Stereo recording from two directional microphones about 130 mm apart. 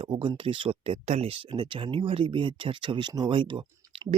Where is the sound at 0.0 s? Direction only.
40° right (ahead or behind).